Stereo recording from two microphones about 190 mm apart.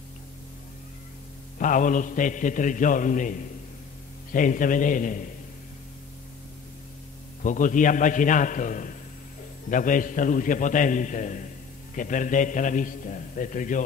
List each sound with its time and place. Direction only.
1.6 s a man's voice: 45° left (ahead or behind)
7.4 s a man's voice: 45° left (ahead or behind)